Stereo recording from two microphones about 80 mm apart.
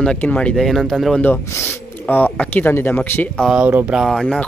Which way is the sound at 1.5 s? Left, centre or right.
Left.